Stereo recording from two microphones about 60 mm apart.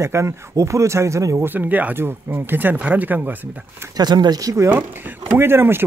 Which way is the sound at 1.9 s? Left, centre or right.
Right.